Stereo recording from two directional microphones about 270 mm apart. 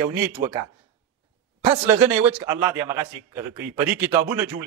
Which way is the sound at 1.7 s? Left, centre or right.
Centre.